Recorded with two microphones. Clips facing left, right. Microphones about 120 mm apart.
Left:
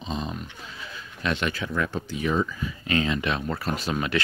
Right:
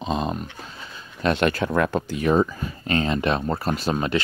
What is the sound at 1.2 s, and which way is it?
Speech, 45° right (ahead or behind).